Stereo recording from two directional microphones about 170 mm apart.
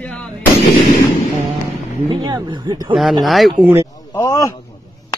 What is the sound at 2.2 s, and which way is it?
Speech, 20° right (ahead or behind).